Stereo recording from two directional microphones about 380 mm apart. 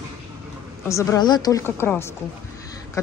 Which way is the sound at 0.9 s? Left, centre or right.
Centre.